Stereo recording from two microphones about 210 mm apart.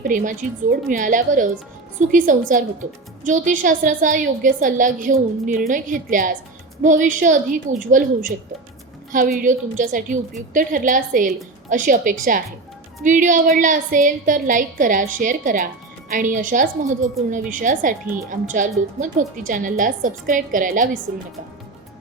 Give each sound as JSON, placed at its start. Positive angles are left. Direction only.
{"t": 0.1, "sound": "a woman's voice", "side_deg": -40}